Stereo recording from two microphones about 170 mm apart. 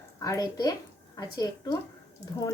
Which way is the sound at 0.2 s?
20° left (ahead or behind).